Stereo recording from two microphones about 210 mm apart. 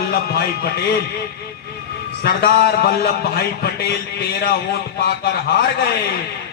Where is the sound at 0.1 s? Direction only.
50° left (ahead or behind).